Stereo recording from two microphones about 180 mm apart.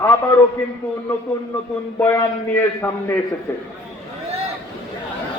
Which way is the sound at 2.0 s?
15° left (ahead or behind).